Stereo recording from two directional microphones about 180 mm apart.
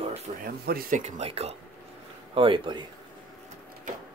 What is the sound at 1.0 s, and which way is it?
Speech, 35° right (ahead or behind).